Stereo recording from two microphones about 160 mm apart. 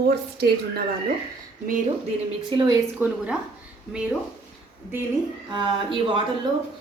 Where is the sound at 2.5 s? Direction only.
30° right (ahead or behind).